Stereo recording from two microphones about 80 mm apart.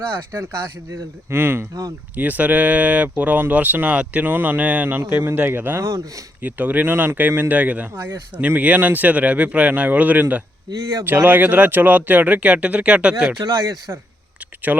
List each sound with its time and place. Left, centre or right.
1.3 s speech: right
7.9 s speech: right
8.4 s speech: centre
13.4 s speech: right
14.7 s speech: right